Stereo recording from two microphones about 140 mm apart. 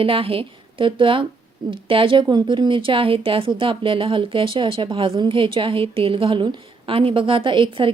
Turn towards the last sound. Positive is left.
turn(degrees=-40)  # may be behind; listen again after turning